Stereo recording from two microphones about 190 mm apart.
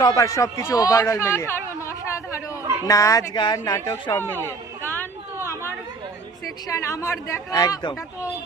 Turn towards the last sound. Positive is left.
turn(degrees=20)  # may be behind; listen again after turning